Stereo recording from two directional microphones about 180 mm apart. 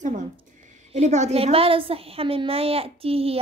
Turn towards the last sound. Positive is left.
turn(degrees=-30)  # may be behind; listen again after turning